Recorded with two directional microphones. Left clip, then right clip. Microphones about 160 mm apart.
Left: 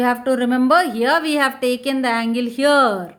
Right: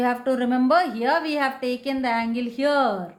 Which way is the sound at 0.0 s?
30° left (ahead or behind).